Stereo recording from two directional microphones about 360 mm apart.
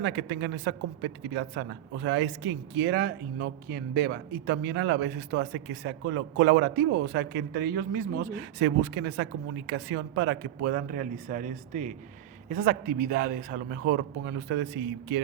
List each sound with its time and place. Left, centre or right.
0.0 s a man's voice: right